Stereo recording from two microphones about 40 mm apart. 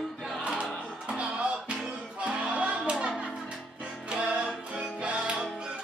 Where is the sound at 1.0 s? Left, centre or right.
Right.